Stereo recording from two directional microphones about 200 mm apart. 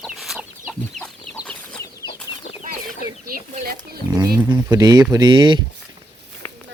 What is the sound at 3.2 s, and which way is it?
Wild animals, 45° right (ahead or behind).